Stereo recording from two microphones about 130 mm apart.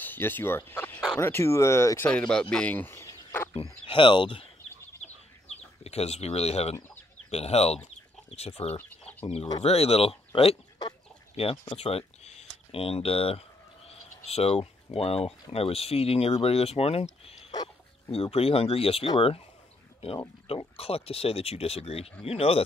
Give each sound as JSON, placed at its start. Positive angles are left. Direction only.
{"t": 0.0, "sound": "turkey", "side_deg": 15}
{"t": 1.1, "sound": "speech", "side_deg": 15}
{"t": 2.0, "sound": "speech", "side_deg": 10}
{"t": 2.5, "sound": "a sound", "side_deg": 10}
{"t": 3.9, "sound": "speech", "side_deg": 40}
{"t": 5.9, "sound": "speech", "side_deg": 55}
{"t": 17.5, "sound": "dog", "side_deg": 30}
{"t": 18.1, "sound": "speech", "side_deg": 50}